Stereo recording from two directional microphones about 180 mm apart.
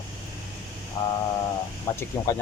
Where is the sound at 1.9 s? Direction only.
10° left (ahead or behind).